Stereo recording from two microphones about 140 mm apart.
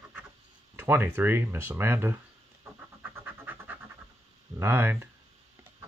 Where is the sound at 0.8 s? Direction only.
15° right (ahead or behind).